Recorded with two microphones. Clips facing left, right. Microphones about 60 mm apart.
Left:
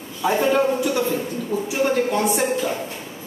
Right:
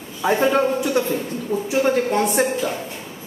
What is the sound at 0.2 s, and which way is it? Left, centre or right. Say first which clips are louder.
Speech: right 1 dB; centre.